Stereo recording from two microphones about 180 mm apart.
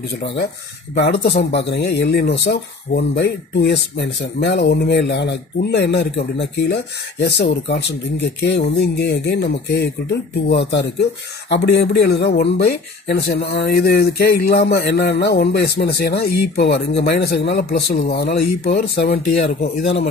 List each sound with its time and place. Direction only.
0.9 s speech: 65° left (ahead or behind)